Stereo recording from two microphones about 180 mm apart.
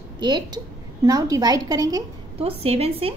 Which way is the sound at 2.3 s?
30° right (ahead or behind).